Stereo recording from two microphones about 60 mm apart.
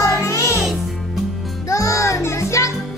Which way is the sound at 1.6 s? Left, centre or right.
Left.